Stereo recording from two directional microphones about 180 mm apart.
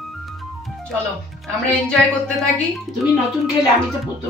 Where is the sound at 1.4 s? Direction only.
Centre (ahead or behind).